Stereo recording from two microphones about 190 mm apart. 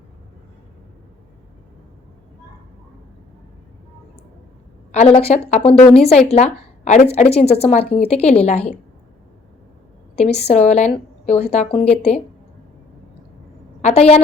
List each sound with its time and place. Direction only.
4.9 s a woman's voice: 35° left (ahead or behind)
5.8 s a woman's voice: 5° left (ahead or behind)
6.1 s a woman's voice: 35° left (ahead or behind)
10.2 s a woman's voice: 35° left (ahead or behind)
13.8 s a woman's voice: 35° left (ahead or behind)